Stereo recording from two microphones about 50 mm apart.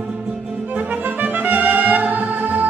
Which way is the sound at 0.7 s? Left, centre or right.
Right.